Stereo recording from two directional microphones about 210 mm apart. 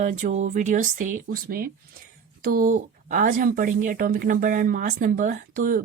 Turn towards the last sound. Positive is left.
turn(degrees=-40)  # may be behind; listen again after turning